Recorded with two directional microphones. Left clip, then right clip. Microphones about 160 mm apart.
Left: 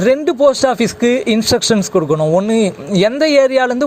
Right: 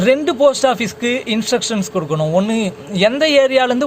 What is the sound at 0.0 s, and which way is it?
A man's voice, 35° left (ahead or behind).